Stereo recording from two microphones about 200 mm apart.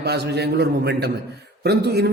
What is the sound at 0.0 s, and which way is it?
A man's voice, 55° right (ahead or behind).